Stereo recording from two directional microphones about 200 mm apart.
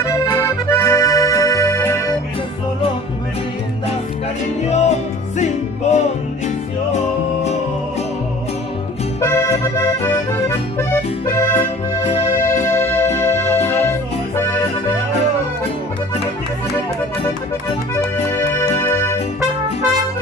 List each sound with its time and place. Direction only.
0.0 s accordion: 15° left (ahead or behind)
4.6 s music: 35° left (ahead or behind)
9.2 s accordion: 15° left (ahead or behind)
12.6 s music: 10° left (ahead or behind)
13.7 s accordion: 10° left (ahead or behind)
17.9 s music: 10° left (ahead or behind)